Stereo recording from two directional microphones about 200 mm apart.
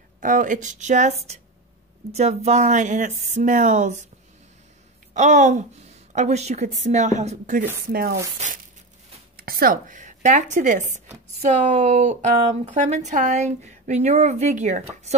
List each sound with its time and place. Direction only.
0.2 s a woman's voice: 40° right (ahead or behind)
2.1 s a woman's voice: 35° right (ahead or behind)
5.1 s a woman's voice: 35° right (ahead or behind)
7.9 s speech: 50° right (ahead or behind)
8.4 s a woman's voice: 35° right (ahead or behind)
9.4 s a woman's voice: 50° right (ahead or behind)